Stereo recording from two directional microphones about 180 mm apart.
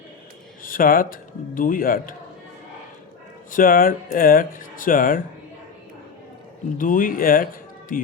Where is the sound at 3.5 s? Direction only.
50° left (ahead or behind).